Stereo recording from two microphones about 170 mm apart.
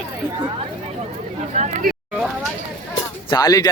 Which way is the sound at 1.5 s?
45° right (ahead or behind).